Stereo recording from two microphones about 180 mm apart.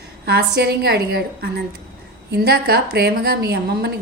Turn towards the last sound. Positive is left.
turn(degrees=-60)  # may be behind; listen again after turning